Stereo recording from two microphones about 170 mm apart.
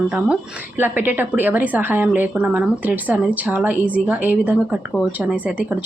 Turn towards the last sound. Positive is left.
turn(degrees=-10)  # may be behind; listen again after turning